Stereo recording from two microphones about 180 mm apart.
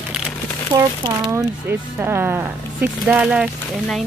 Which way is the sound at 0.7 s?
20° right (ahead or behind).